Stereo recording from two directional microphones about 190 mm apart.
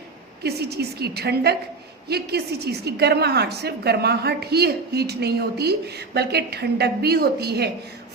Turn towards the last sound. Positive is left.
turn(degrees=-60)  # may be behind; listen again after turning